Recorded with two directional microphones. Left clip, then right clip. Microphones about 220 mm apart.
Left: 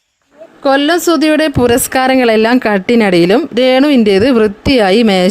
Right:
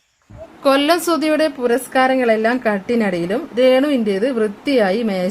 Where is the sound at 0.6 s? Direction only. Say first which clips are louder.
Left 4 dB; 25° left (ahead or behind).